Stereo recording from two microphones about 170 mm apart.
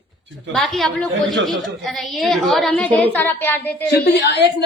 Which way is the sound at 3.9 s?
80° left.